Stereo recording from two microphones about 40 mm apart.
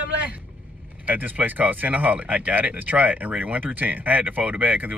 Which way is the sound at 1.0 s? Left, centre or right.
Right.